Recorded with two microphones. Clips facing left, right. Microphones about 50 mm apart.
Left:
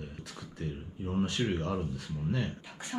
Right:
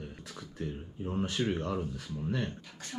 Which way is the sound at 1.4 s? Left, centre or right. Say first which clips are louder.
Even; centre.